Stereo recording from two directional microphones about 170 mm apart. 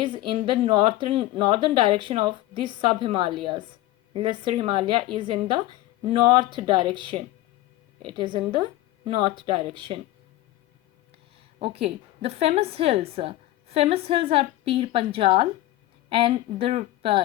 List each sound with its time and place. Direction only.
0.0 s speech: 30° right (ahead or behind)
11.6 s a woman's voice: 35° right (ahead or behind)